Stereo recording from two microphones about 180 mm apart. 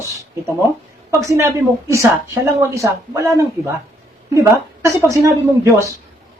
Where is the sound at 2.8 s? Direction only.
15° right (ahead or behind).